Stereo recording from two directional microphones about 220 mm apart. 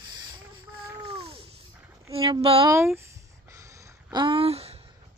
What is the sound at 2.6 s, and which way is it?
Speech, 10° right (ahead or behind).